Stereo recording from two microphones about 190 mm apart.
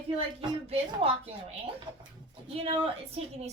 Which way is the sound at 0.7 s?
30° right (ahead or behind).